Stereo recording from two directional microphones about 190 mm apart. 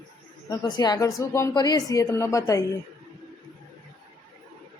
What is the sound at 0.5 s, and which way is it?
Speech, 20° left (ahead or behind).